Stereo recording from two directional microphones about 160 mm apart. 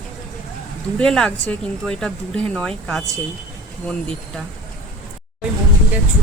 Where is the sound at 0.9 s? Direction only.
5° left (ahead or behind).